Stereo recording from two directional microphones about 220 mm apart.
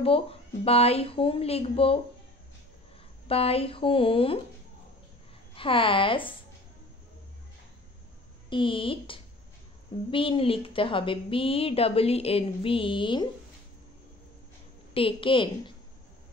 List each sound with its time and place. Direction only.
0.0 s a woman's voice: 25° left (ahead or behind)
3.3 s a woman's voice: 25° left (ahead or behind)
5.6 s a woman's voice: 25° left (ahead or behind)
8.5 s a woman's voice: 20° left (ahead or behind)
15.0 s a woman's voice: 25° left (ahead or behind)